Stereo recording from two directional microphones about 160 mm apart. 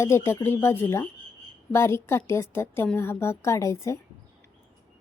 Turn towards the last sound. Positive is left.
turn(degrees=20)  # may be behind; listen again after turning